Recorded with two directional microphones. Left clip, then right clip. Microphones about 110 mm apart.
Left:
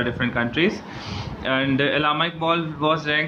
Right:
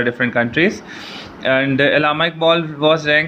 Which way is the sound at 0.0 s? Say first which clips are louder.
Right 7 dB; 40° right (ahead or behind).